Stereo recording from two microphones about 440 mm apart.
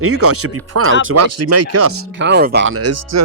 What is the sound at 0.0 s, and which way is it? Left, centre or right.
Speech, right.